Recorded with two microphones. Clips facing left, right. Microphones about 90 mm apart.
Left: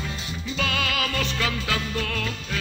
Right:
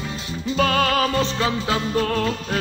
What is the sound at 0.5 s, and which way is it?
Music, 40° right (ahead or behind).